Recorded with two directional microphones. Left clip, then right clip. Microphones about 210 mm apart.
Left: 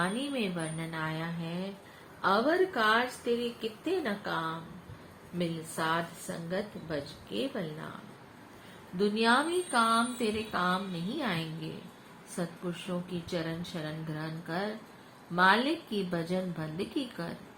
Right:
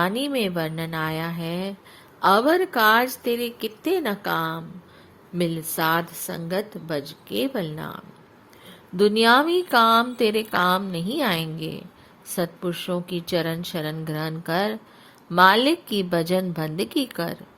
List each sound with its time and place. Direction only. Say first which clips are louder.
0.0 s a woman's voice: right 9 dB; 55° right (ahead or behind)
9.0 s a woman's voice: right 10 dB; 50° right (ahead or behind)